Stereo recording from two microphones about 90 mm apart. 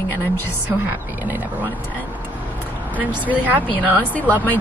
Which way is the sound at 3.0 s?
20° right (ahead or behind).